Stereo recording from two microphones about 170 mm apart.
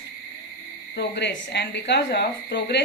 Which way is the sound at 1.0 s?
85° left.